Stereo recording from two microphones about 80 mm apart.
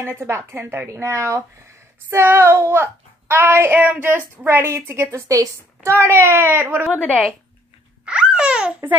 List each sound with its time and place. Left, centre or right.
0.0 s a woman's voice: right
7.0 s a woman's voice: centre
8.0 s a sound: centre